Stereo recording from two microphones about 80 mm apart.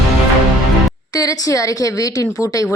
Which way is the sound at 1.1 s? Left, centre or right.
Left.